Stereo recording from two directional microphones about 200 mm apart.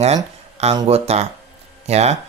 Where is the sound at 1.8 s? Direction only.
35° right (ahead or behind).